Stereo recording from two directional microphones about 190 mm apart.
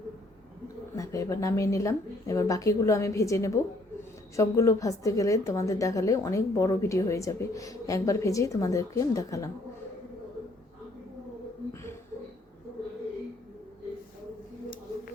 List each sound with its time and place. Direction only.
0.9 s a woman's voice: 15° left (ahead or behind)